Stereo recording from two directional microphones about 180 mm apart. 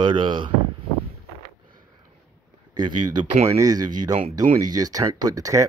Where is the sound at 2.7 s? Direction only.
25° right (ahead or behind).